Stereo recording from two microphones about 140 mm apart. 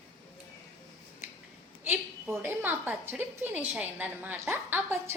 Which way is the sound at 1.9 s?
15° right (ahead or behind).